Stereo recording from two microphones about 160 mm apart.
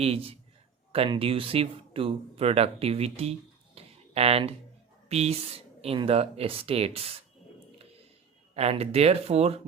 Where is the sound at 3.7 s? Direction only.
40° right (ahead or behind).